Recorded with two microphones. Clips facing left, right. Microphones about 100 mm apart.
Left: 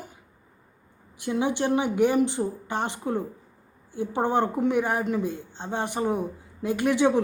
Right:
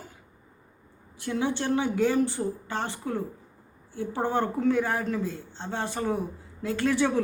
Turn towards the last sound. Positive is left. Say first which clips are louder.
# left 3 dB
turn(degrees=15)  # may be behind; listen again after turning